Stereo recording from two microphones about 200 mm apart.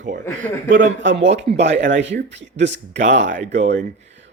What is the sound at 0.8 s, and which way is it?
Speech, 65° right (ahead or behind).